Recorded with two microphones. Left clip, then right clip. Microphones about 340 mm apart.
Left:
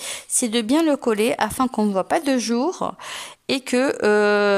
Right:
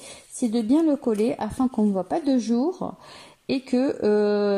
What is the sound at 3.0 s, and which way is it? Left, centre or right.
Speech, left.